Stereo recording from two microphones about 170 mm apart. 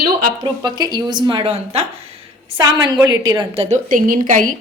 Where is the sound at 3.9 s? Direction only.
50° right (ahead or behind).